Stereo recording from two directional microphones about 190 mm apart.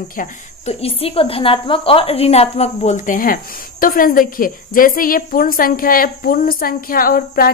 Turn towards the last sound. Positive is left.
turn(degrees=50)  # may be behind; listen again after turning